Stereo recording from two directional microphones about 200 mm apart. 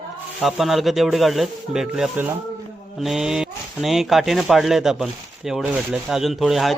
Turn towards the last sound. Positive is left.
turn(degrees=0)  # may be behind; listen again after turning